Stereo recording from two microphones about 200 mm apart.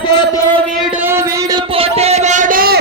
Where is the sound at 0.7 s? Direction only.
5° right (ahead or behind).